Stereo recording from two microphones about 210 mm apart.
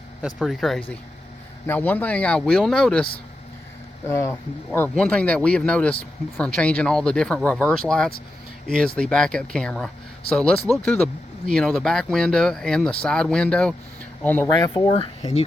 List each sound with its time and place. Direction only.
0.2 s speech: centre (ahead or behind)
4.1 s speech: 10° left (ahead or behind)
14.7 s speech: 25° left (ahead or behind)